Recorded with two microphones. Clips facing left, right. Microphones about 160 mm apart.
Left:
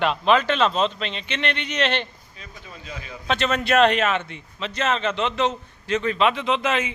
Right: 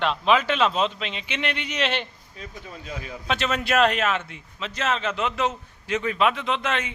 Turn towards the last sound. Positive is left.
turn(degrees=5)  # may be behind; listen again after turning